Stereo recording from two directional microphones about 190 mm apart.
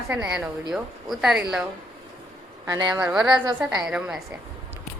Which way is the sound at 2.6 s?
20° right (ahead or behind).